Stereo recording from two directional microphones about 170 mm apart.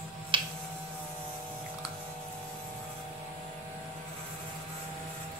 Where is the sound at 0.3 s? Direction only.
30° right (ahead or behind).